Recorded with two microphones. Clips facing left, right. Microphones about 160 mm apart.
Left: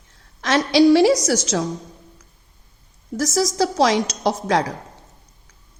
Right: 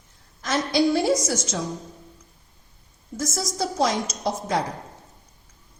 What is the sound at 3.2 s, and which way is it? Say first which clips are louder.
A woman's voice: left 8 dB; 85° left.